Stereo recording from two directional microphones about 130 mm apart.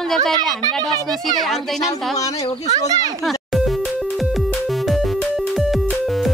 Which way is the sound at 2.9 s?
30° right (ahead or behind).